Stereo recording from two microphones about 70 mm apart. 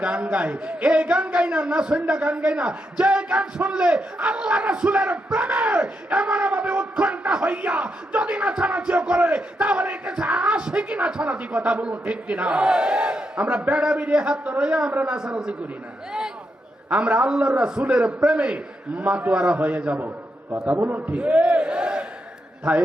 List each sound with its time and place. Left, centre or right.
0.0 s a man's voice: centre
16.9 s a man's voice: centre